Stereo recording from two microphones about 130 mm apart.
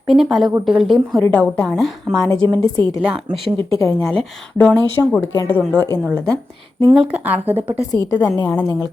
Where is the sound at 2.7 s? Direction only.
30° left (ahead or behind).